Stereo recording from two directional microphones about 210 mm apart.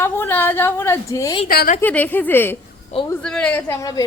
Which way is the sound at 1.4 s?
45° left (ahead or behind).